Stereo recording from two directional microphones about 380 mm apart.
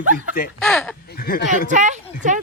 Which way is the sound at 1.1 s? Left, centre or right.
Left.